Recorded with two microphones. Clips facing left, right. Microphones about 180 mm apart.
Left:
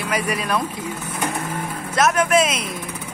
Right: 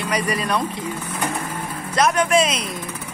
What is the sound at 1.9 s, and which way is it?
Speech, 5° left (ahead or behind).